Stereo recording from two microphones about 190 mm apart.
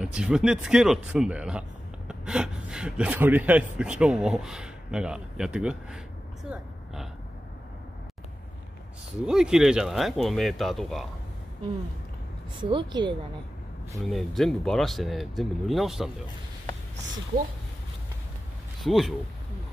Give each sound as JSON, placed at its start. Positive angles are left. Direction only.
{"t": 0.0, "sound": "speech", "side_deg": -5}
{"t": 9.2, "sound": "speech", "side_deg": -5}
{"t": 12.6, "sound": "speech", "side_deg": -25}
{"t": 14.0, "sound": "speech", "side_deg": 0}
{"t": 18.8, "sound": "speech", "side_deg": 0}